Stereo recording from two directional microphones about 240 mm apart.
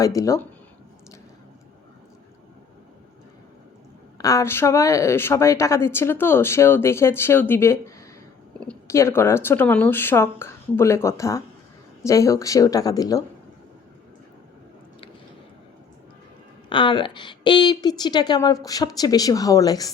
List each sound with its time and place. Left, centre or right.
0.2 s speech: centre
4.2 s speech: centre
16.6 s speech: centre